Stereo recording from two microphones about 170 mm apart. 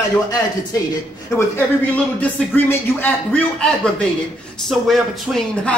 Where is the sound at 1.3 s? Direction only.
10° left (ahead or behind).